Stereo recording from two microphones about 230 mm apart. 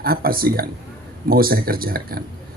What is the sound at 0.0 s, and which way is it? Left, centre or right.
Speech, right.